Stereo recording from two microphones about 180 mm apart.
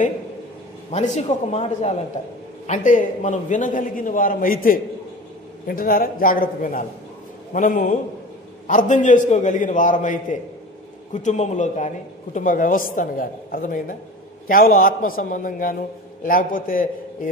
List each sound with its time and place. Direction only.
0.9 s a man's voice: 40° left (ahead or behind)
11.1 s a man's voice: 40° left (ahead or behind)